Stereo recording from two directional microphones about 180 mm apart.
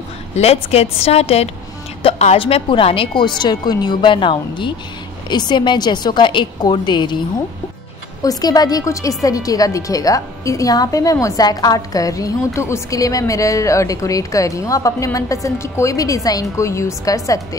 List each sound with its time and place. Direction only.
0.4 s a woman's voice: 35° left (ahead or behind); by 17.4 s 20° left (ahead or behind)